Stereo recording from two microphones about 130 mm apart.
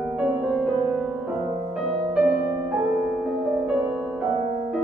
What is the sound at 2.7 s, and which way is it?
Music, 10° right (ahead or behind).